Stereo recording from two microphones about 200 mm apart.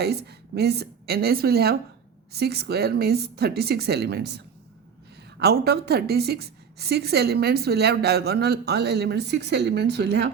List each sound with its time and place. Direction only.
0.0 s a woman's voice: 55° right (ahead or behind)